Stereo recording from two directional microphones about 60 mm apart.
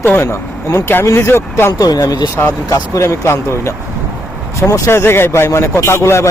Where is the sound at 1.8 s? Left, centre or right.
Left.